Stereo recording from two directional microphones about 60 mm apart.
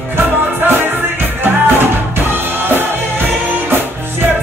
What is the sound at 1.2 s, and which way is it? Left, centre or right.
Music, right.